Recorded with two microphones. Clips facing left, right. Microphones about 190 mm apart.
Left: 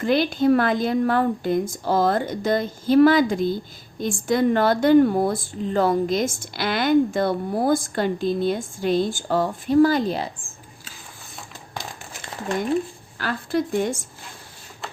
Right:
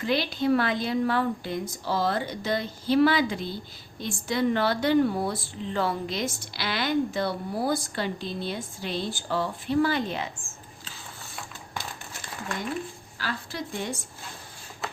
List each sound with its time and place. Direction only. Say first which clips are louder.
0.0 s a woman's voice: left 7 dB; 50° left (ahead or behind)
13.1 s a woman's voice: left 10 dB; 55° left (ahead or behind)